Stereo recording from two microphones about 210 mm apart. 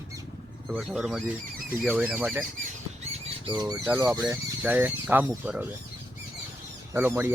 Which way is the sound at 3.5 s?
20° right (ahead or behind).